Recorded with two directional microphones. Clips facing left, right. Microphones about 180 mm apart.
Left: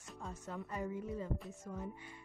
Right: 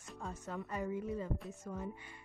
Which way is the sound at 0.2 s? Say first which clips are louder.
Right 2 dB; 70° right (ahead or behind).